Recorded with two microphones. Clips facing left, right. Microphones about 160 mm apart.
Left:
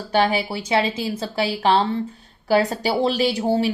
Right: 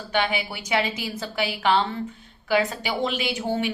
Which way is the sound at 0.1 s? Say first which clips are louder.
Left 6 dB; 35° left (ahead or behind).